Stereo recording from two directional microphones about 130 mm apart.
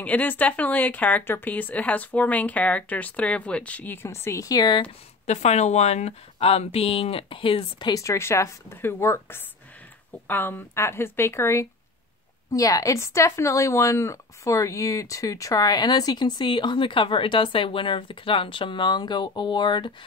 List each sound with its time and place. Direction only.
0.0 s speech: 15° left (ahead or behind); by 4.8 s 35° left (ahead or behind)
5.2 s speech: 60° left (ahead or behind); by 7.9 s 45° left (ahead or behind)
7.9 s a woman's voice: 25° left (ahead or behind)